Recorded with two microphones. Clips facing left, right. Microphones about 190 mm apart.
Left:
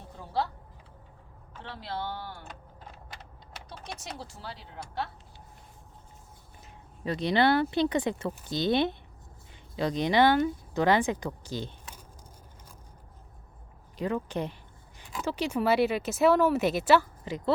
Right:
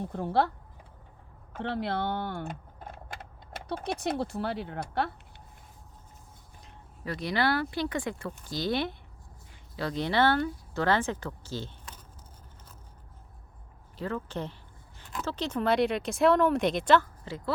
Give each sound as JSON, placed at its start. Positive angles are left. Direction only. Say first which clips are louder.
{"t": 0.1, "sound": "speech", "louder": "right 4 dB", "side_deg": -55}
{"t": 1.5, "sound": "speech", "louder": "right 7 dB", "side_deg": -60}
{"t": 7.0, "sound": "speech", "louder": "left 4 dB", "side_deg": 25}
{"t": 14.0, "sound": "speech", "louder": "left 3 dB", "side_deg": 15}